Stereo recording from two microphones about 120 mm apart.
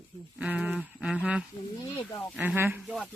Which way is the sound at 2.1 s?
30° left (ahead or behind).